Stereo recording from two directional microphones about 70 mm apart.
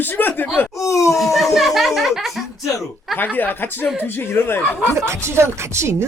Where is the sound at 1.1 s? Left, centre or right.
Centre.